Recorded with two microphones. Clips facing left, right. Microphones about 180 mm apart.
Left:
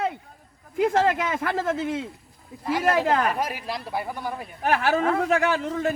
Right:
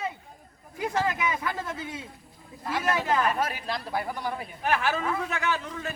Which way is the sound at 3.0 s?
60° left (ahead or behind).